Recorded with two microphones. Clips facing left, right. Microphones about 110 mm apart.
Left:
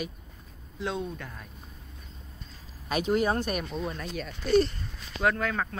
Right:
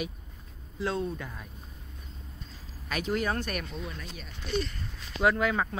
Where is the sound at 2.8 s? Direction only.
20° left (ahead or behind).